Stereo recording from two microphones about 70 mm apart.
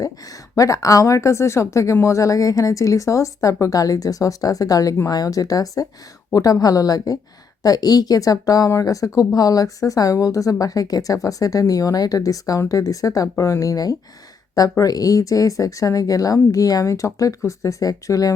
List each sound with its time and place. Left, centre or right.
0.5 s speech: left
13.2 s speech: left